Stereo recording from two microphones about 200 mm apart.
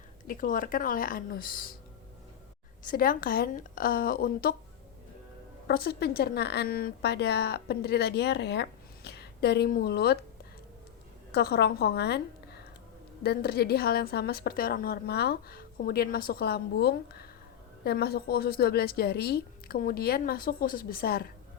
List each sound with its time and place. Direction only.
0.3 s a woman's voice: 45° left (ahead or behind)
2.8 s a woman's voice: 45° left (ahead or behind)
5.6 s a woman's voice: 55° left (ahead or behind)
11.3 s a woman's voice: 55° left (ahead or behind)
13.2 s a woman's voice: 50° left (ahead or behind)